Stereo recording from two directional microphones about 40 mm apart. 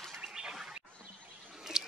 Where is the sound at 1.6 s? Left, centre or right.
Centre.